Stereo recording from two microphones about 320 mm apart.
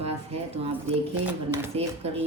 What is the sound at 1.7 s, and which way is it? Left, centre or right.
Speech, centre.